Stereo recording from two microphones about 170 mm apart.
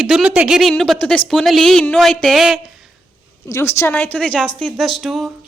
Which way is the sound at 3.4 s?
15° left (ahead or behind).